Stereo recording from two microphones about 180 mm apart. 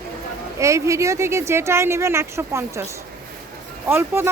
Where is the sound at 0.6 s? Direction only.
15° right (ahead or behind).